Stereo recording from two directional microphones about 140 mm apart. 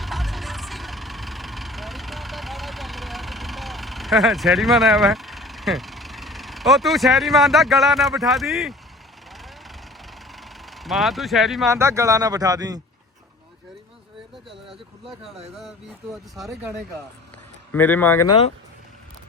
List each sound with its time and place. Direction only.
0.0 s vehicle: centre (ahead or behind)
11.7 s speech: 20° right (ahead or behind)
15.0 s speech: 40° right (ahead or behind)
17.7 s speech: 15° left (ahead or behind)
18.3 s speech: 40° left (ahead or behind)